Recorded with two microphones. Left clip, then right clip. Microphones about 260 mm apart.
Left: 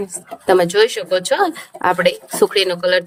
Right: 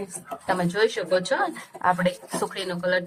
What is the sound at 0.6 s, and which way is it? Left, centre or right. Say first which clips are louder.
Speech: left 8 dB; left.